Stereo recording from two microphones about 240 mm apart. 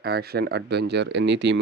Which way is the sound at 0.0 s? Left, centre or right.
Right.